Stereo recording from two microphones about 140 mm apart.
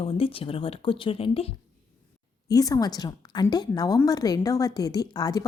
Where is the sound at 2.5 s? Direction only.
25° left (ahead or behind).